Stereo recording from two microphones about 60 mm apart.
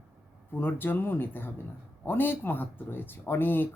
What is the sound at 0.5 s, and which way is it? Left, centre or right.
Speech, left.